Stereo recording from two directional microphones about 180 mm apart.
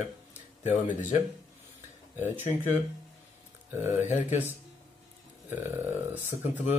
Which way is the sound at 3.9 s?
40° left (ahead or behind).